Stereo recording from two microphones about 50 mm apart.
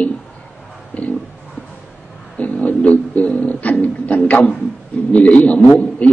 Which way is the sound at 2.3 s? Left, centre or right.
Left.